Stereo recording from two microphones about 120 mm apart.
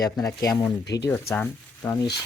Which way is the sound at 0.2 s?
25° left (ahead or behind).